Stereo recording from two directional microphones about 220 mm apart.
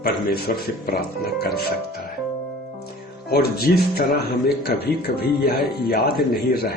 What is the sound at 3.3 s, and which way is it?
Speech, 45° left (ahead or behind).